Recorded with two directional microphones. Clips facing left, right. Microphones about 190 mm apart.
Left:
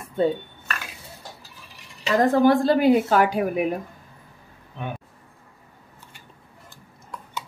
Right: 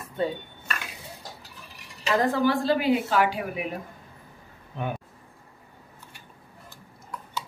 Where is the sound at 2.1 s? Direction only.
45° left (ahead or behind).